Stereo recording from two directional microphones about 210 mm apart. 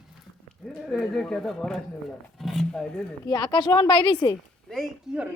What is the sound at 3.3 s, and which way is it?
A woman's voice, 20° left (ahead or behind).